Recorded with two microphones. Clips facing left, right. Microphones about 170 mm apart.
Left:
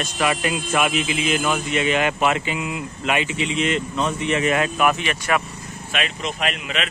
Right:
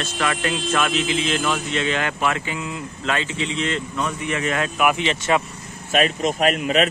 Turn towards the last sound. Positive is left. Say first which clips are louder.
# right 7 dB
turn(degrees=-40)  # may be behind; listen again after turning